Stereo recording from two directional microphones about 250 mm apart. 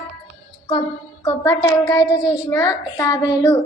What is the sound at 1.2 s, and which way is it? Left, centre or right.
A woman's voice, centre.